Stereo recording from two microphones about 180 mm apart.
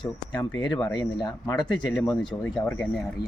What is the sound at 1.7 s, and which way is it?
Speech, 5° left (ahead or behind).